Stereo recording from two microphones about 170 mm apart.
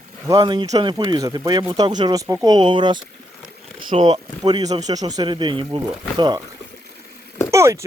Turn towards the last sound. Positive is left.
turn(degrees=-15)  # may be behind; listen again after turning